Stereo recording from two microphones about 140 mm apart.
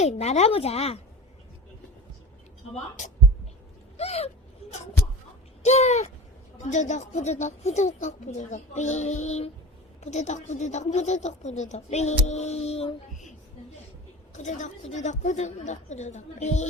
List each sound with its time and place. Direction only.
0.0 s speech: 50° left (ahead or behind)
3.9 s speech: 50° left (ahead or behind)
5.6 s a woman's voice: 50° left (ahead or behind)
14.3 s a woman's voice: 60° left (ahead or behind)